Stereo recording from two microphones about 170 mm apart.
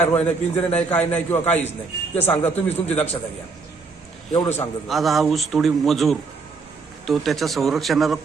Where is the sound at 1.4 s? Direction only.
40° left (ahead or behind).